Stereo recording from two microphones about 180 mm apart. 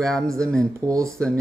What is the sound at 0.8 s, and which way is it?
Speech, 15° right (ahead or behind).